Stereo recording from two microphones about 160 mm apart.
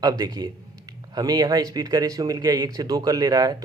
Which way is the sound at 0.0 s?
25° right (ahead or behind).